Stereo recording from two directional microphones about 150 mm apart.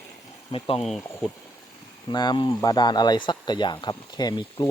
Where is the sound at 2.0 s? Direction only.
30° left (ahead or behind).